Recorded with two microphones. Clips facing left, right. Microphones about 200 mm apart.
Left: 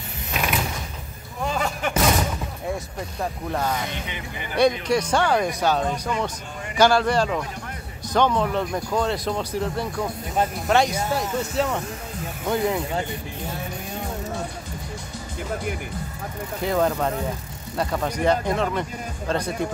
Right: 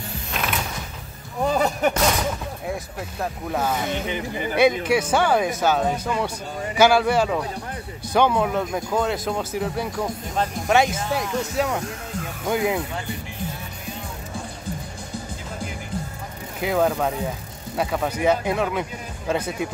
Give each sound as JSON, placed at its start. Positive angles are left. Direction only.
{"t": 0.3, "sound": "mechanisms", "side_deg": 0}
{"t": 1.4, "sound": "a sound", "side_deg": -35}
{"t": 3.2, "sound": "speech", "side_deg": -5}
{"t": 16.6, "sound": "speech", "side_deg": -5}